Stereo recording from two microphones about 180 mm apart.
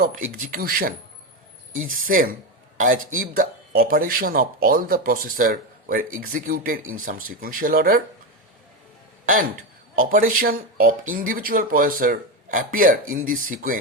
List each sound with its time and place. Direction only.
0.0 s speech: 45° right (ahead or behind)
10.0 s speech: 50° right (ahead or behind)